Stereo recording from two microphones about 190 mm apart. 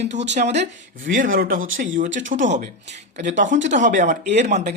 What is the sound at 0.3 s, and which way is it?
Speech, 35° right (ahead or behind).